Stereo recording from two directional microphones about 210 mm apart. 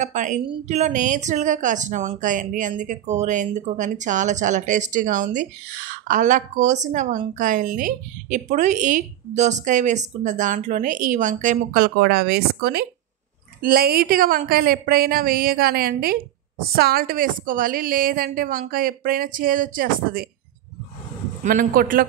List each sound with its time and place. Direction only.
0.0 s a woman's voice: 35° right (ahead or behind)
21.5 s a woman's voice: 40° right (ahead or behind)